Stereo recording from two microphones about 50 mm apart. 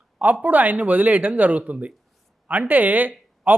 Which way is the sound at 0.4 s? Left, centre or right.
Right.